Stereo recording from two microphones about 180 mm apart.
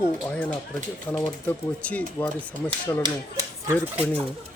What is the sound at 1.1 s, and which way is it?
Speech, 10° left (ahead or behind).